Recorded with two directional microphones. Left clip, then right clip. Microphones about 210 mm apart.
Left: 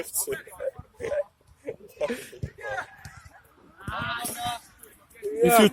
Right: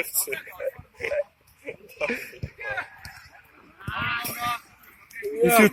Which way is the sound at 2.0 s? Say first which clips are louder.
Right 3 dB; centre (ahead or behind).